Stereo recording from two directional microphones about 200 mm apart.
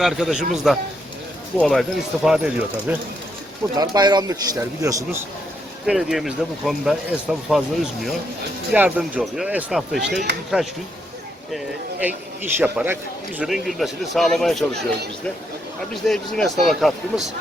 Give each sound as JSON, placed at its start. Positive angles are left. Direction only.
{"t": 0.0, "sound": "speech", "side_deg": 0}
{"t": 3.8, "sound": "speech", "side_deg": -20}
{"t": 5.8, "sound": "speech", "side_deg": -5}
{"t": 8.7, "sound": "speech", "side_deg": -10}
{"t": 16.0, "sound": "speech", "side_deg": 0}